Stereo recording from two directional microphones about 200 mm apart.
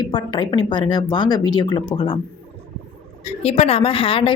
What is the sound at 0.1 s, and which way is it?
A woman's voice, 20° left (ahead or behind).